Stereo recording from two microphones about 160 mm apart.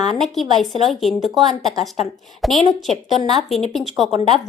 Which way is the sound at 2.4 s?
Centre (ahead or behind).